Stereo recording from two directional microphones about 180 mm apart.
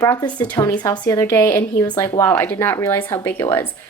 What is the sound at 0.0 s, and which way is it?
A woman's voice, 20° left (ahead or behind).